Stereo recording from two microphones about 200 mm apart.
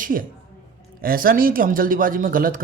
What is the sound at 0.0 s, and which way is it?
A woman's voice, 45° right (ahead or behind).